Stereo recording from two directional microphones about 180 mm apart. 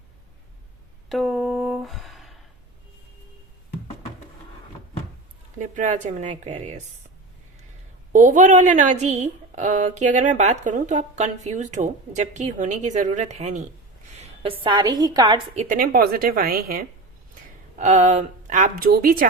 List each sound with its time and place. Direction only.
1.1 s a sound: centre (ahead or behind)
5.5 s a woman's voice: 45° right (ahead or behind)
8.1 s a woman's voice: 45° right (ahead or behind); by 15.4 s 20° right (ahead or behind)
15.5 s speech: 45° right (ahead or behind)
17.7 s speech: 40° right (ahead or behind)